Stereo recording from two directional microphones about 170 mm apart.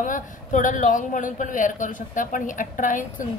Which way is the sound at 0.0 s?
50° left (ahead or behind).